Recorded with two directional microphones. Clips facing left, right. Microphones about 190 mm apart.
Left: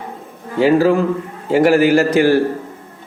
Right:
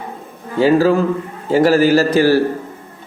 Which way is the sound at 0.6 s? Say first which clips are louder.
Even; 20° left (ahead or behind).